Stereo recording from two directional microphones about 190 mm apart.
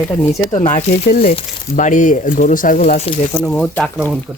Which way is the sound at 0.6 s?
45° left (ahead or behind).